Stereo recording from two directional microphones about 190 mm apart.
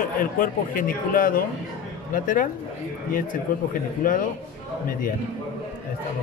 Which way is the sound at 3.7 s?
45° left (ahead or behind).